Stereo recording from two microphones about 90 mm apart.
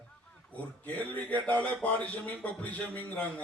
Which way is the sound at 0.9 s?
15° left (ahead or behind).